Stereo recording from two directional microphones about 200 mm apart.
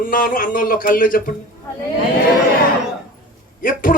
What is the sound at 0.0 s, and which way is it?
A man's voice, 45° left (ahead or behind).